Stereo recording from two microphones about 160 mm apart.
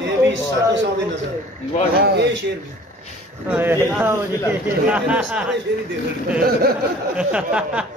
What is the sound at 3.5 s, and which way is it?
A man's voice, 10° right (ahead or behind).